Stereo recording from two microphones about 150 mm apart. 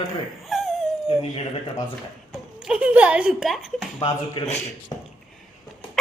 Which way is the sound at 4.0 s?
40° left (ahead or behind).